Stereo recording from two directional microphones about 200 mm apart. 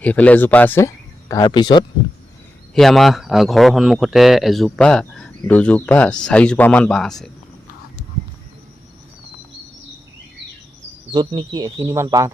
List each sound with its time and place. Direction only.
0.0 s speech: 5° left (ahead or behind); by 1.8 s 20° left (ahead or behind)
2.7 s speech: centre (ahead or behind)
11.1 s speech: 20° right (ahead or behind)